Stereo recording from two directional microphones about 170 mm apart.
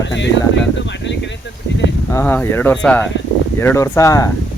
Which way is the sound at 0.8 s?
90° left.